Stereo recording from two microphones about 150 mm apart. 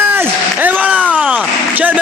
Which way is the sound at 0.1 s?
10° right (ahead or behind).